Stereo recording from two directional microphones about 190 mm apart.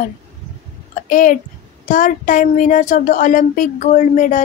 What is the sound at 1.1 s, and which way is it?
Speech, 45° left (ahead or behind).